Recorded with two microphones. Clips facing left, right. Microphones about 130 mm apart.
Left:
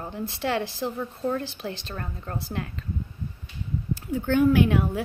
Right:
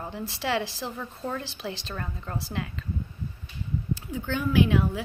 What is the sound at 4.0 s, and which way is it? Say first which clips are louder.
Speech: left 9 dB; 55° left (ahead or behind).